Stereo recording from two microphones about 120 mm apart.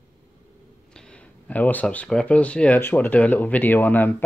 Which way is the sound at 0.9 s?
10° left (ahead or behind).